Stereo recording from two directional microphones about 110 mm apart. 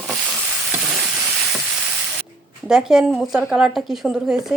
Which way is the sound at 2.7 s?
5° right (ahead or behind).